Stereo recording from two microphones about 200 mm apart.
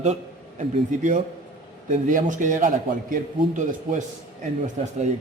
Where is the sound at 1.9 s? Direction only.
40° right (ahead or behind).